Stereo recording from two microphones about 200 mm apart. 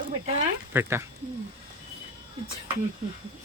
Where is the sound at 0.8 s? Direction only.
10° right (ahead or behind).